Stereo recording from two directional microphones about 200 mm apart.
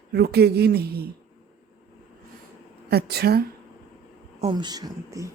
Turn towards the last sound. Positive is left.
turn(degrees=-15)  # may be behind; listen again after turning